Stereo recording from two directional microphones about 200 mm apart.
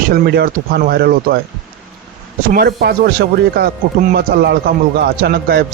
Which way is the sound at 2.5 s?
50° right (ahead or behind).